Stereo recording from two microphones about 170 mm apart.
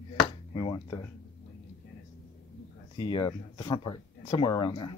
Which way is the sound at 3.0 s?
30° left (ahead or behind).